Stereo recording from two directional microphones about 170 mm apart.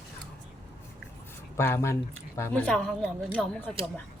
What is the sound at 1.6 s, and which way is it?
Speech, 15° left (ahead or behind).